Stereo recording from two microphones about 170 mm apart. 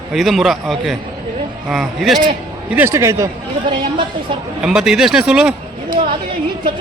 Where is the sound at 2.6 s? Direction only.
10° right (ahead or behind).